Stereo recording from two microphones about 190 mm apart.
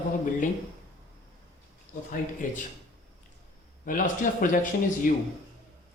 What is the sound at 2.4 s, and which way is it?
Speech, 45° left (ahead or behind).